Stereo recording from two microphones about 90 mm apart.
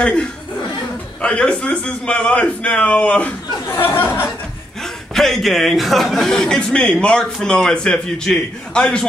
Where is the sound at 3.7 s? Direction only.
25° left (ahead or behind).